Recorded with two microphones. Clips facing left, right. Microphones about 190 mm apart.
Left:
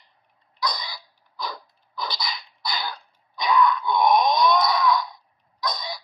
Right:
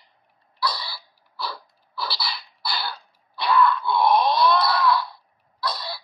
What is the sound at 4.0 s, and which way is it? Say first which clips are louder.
Wail: even; 5° right (ahead or behind).